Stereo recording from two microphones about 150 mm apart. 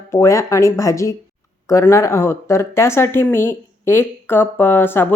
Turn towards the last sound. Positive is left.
turn(degrees=15)  # may be behind; listen again after turning